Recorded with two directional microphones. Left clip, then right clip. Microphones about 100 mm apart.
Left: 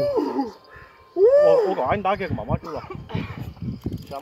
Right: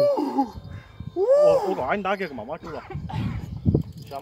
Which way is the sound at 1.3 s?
50° right (ahead or behind).